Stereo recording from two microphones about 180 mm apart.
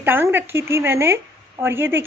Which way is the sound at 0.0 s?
10° right (ahead or behind).